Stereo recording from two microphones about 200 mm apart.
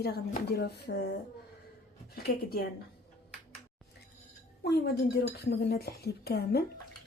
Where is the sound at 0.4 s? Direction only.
55° left (ahead or behind).